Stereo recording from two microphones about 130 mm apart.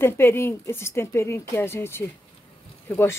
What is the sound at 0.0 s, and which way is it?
A woman's voice, 20° left (ahead or behind).